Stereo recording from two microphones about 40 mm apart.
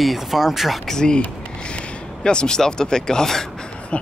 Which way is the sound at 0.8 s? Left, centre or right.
Centre.